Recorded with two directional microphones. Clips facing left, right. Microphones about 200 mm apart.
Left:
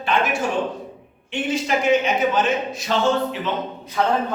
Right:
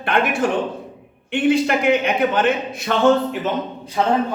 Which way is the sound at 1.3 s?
60° right (ahead or behind).